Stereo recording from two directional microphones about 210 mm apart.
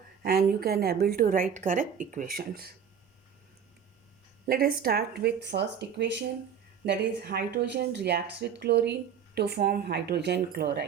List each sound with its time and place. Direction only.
0.3 s speech: 45° right (ahead or behind)
4.4 s speech: 45° right (ahead or behind)